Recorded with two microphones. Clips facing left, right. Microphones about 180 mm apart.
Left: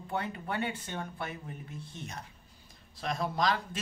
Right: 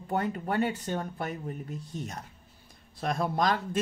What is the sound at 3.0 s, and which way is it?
Speech, 55° right (ahead or behind).